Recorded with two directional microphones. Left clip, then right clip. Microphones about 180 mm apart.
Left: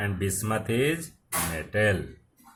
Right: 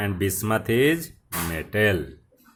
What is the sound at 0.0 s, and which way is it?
Speech, 50° right (ahead or behind).